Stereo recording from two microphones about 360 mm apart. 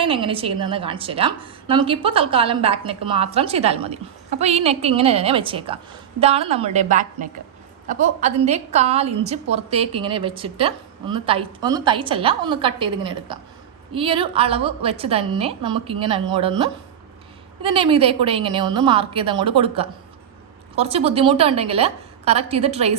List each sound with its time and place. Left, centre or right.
0.0 s a woman's voice: centre
17.6 s a woman's voice: centre